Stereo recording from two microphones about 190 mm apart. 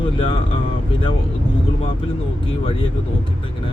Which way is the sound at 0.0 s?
30° left (ahead or behind).